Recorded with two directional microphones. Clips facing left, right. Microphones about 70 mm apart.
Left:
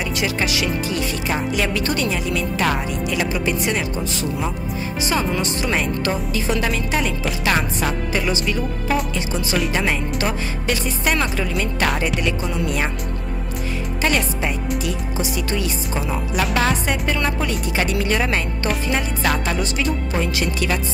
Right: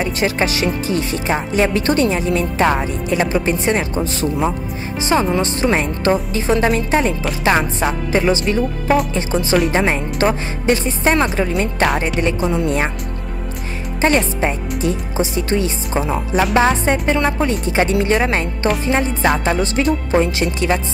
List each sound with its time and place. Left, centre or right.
0.0 s speech: right
14.0 s speech: right